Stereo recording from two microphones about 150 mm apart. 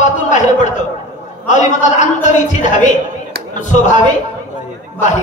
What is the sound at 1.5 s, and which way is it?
Speech, 55° left (ahead or behind).